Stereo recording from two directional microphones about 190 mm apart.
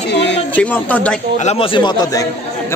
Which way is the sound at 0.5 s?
10° left (ahead or behind).